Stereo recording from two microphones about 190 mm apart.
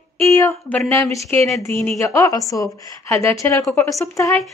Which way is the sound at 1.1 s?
Centre (ahead or behind).